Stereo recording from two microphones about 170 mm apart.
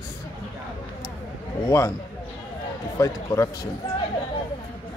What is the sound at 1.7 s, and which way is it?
Speech, 20° left (ahead or behind).